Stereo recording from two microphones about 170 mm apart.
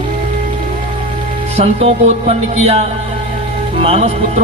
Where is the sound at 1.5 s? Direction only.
35° right (ahead or behind).